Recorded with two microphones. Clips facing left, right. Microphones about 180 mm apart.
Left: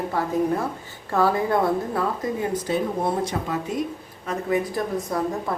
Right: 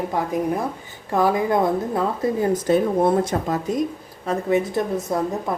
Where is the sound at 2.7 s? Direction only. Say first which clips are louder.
Right 7 dB; 50° right (ahead or behind).